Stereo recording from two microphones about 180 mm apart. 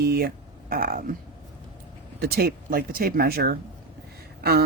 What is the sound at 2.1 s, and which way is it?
Speech, 60° right (ahead or behind).